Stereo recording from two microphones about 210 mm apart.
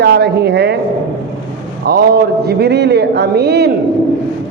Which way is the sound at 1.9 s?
50° right (ahead or behind).